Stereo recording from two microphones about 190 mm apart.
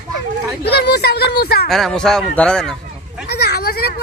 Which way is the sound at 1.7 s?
Centre (ahead or behind).